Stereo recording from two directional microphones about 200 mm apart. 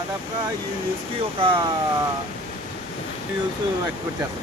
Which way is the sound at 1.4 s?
25° right (ahead or behind).